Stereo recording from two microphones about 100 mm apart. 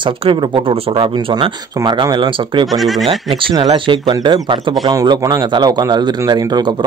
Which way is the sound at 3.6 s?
60° right (ahead or behind).